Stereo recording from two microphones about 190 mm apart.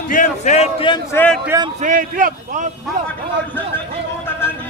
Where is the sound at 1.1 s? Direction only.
10° left (ahead or behind).